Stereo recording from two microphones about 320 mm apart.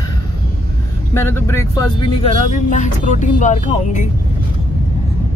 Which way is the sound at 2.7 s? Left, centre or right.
Left.